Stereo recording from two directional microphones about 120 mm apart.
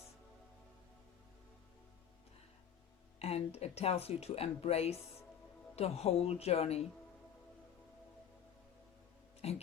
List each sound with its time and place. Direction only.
3.2 s speech: 55° left (ahead or behind)
9.4 s speech: 60° left (ahead or behind)